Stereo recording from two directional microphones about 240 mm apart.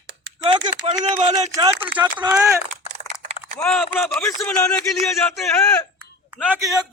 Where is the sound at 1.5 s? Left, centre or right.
Centre.